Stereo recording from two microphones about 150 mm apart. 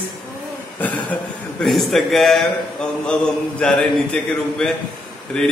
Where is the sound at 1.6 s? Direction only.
Centre (ahead or behind).